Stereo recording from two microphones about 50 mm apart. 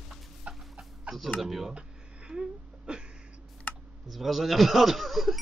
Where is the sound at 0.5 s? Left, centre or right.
Centre.